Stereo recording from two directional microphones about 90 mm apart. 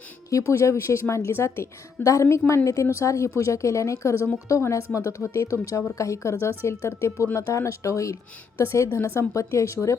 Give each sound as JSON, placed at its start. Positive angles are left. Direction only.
{"t": 0.3, "sound": "a woman's voice", "side_deg": 35}